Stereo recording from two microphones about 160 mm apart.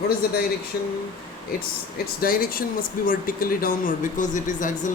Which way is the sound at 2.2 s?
65° left (ahead or behind).